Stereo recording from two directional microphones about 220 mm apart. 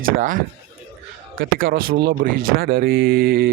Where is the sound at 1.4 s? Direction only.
40° right (ahead or behind).